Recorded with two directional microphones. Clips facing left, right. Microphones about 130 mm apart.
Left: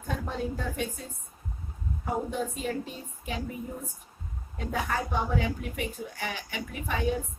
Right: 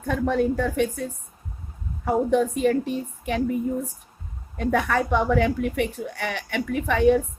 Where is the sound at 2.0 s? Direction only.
65° right (ahead or behind).